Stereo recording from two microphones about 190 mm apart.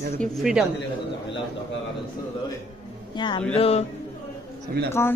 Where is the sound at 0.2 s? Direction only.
Centre (ahead or behind).